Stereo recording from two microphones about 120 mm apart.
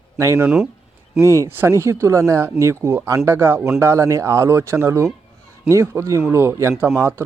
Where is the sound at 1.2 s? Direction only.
25° left (ahead or behind).